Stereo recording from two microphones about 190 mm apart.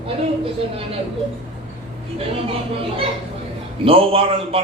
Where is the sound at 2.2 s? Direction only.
30° right (ahead or behind).